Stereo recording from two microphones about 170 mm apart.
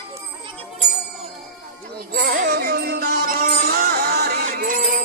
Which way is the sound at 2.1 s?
65° right (ahead or behind).